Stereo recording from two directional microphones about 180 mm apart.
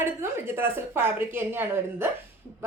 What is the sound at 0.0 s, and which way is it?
Speech, 15° right (ahead or behind).